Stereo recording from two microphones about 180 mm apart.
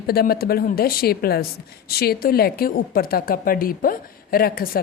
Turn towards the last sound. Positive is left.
turn(degrees=55)  # may be behind; listen again after turning